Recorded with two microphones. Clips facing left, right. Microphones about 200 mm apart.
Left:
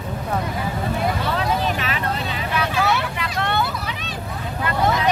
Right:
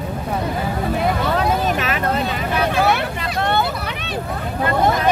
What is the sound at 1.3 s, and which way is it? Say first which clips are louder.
Vehicle: right 3 dB; 45° right (ahead or behind).